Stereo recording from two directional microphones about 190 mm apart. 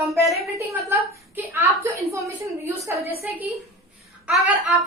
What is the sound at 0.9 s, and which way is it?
A woman's voice, 10° right (ahead or behind).